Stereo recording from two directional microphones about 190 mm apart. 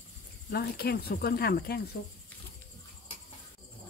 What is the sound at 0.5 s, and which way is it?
Speech, 55° left (ahead or behind).